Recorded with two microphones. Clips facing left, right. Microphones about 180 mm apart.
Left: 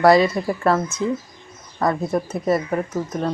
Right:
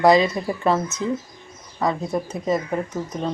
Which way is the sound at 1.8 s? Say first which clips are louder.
Left 2 dB; 10° right (ahead or behind).